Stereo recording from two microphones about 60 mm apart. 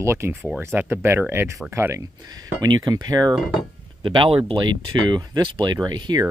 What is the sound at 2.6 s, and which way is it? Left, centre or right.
Speech, right.